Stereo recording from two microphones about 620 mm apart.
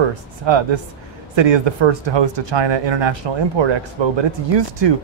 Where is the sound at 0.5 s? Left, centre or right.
Right.